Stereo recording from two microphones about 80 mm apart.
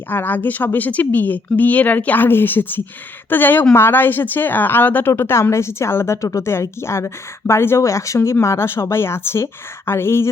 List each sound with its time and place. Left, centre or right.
0.1 s a woman's voice: left